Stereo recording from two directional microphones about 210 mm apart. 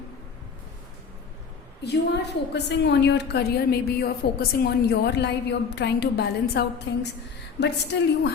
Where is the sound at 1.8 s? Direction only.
50° left (ahead or behind).